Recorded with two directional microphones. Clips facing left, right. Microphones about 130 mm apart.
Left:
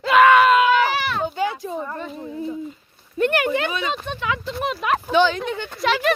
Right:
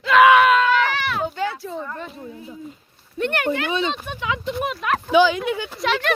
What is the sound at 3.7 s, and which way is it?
Speech, 25° right (ahead or behind).